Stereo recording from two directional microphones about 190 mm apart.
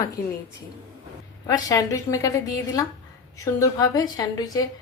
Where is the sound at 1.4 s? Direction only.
20° left (ahead or behind).